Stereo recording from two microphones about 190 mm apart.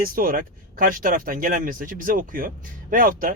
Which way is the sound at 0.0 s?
50° right (ahead or behind).